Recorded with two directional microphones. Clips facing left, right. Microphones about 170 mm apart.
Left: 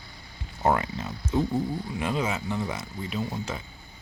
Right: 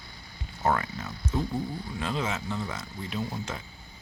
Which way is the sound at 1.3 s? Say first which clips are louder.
Left 5 dB; 20° left (ahead or behind).